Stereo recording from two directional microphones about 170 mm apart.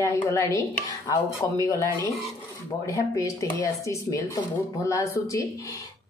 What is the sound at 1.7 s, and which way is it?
A woman's voice, 20° left (ahead or behind).